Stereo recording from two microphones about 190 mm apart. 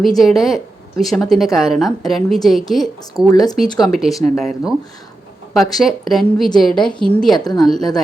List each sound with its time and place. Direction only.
0.0 s speech: centre (ahead or behind)
3.2 s speech: 20° left (ahead or behind)
3.8 s speech: centre (ahead or behind)
5.7 s speech: centre (ahead or behind)
7.3 s speech: 20° left (ahead or behind)
7.6 s speech: centre (ahead or behind)